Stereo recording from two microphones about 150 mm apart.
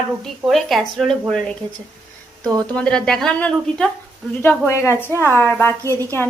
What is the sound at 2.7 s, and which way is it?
A woman's voice, 5° left (ahead or behind).